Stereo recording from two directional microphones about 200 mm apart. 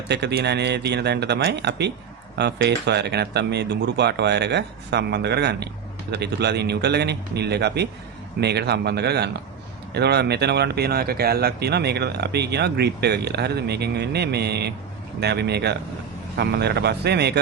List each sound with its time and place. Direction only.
0.1 s speech: 55° right (ahead or behind)